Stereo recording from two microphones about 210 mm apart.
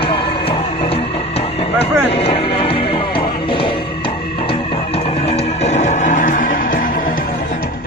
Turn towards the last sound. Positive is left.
turn(degrees=40)  # may be behind; listen again after turning